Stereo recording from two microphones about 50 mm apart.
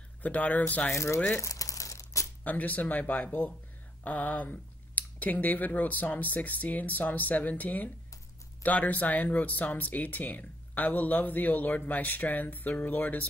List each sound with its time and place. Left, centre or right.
0.2 s speech: left
0.9 s speech: left
1.4 s crumpling: left
2.4 s speech: left